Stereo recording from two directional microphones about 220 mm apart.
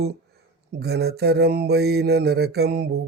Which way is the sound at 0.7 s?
45° right (ahead or behind).